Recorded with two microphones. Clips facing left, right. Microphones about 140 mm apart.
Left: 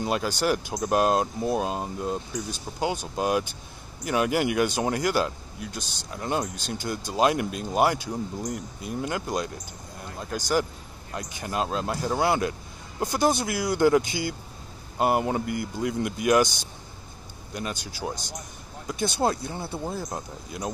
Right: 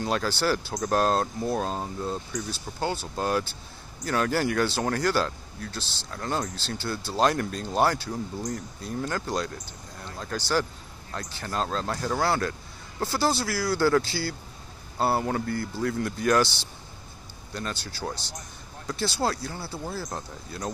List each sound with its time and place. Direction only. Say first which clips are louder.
0.0 s speech: left 1 dB; 10° left (ahead or behind)